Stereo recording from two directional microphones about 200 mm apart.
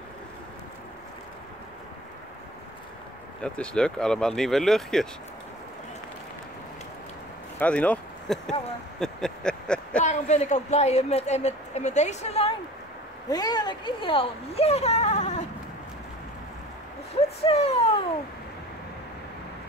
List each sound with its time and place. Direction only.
3.4 s speech: 5° left (ahead or behind)
7.5 s speech: 5° left (ahead or behind)
9.0 s a sound: 5° left (ahead or behind)
10.0 s speech: 35° left (ahead or behind)
13.3 s speech: 20° left (ahead or behind)
17.4 s speech: 30° left (ahead or behind)